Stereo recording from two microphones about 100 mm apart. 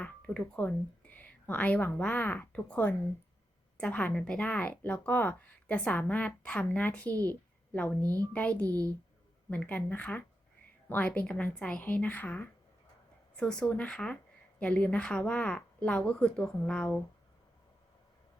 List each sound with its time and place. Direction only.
0.0 s speech: 15° left (ahead or behind)
8.6 s a woman's voice: 35° right (ahead or behind)
9.5 s speech: 15° left (ahead or behind)